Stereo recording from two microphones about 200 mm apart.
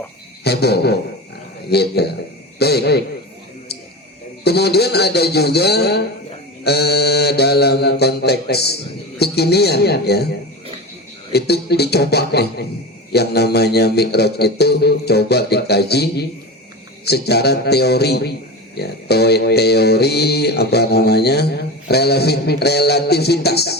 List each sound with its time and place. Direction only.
0.4 s mantra: 55° left (ahead or behind)
1.7 s a man's voice: 55° left (ahead or behind)
2.6 s mantra: 55° left (ahead or behind)
4.4 s mantra: 55° left (ahead or behind)
11.3 s a man's voice: 55° left (ahead or behind)
17.1 s mantra: 55° left (ahead or behind)